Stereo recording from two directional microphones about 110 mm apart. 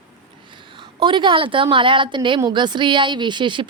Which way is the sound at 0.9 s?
50° right (ahead or behind).